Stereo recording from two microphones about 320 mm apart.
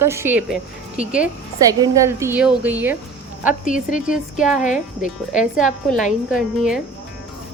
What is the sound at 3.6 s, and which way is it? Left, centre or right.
Speech, left.